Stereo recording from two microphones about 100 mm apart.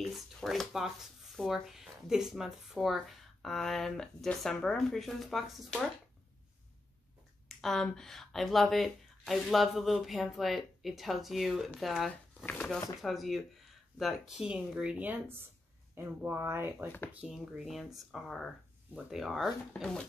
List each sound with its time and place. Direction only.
0.1 s speech: centre (ahead or behind)
7.4 s speech: 5° left (ahead or behind); by 16.9 s 20° right (ahead or behind)
17.2 s speech: 5° right (ahead or behind)
19.7 s speech: 10° left (ahead or behind)